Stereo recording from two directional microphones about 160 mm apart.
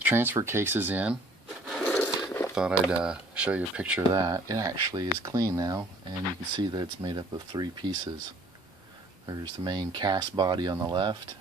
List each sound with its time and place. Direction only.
0.0 s speech: 15° right (ahead or behind)
1.7 s wood: 5° left (ahead or behind)
2.6 s speech: 5° right (ahead or behind)
4.1 s speech: 20° right (ahead or behind)
9.2 s speech: 25° right (ahead or behind)